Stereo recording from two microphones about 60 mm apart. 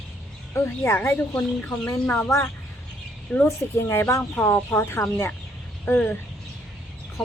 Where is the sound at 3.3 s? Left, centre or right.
Centre.